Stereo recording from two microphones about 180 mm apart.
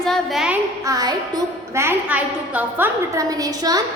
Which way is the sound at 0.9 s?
20° right (ahead or behind).